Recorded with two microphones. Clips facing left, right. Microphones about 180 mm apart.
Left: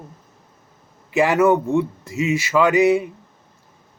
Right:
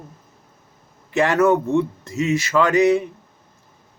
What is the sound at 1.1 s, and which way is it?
Speech, 10° left (ahead or behind).